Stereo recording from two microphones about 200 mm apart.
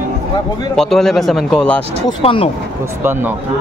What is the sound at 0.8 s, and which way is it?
Speech, centre (ahead or behind).